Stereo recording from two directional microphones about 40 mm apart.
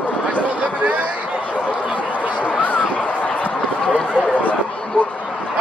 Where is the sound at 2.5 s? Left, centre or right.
Left.